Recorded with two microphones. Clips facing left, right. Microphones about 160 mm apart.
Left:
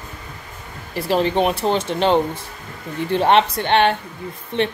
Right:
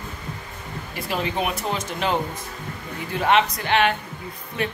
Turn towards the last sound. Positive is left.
turn(degrees=25)  # may be behind; listen again after turning